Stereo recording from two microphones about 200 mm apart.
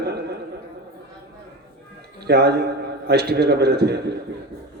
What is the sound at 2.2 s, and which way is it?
A man's voice, 55° right (ahead or behind).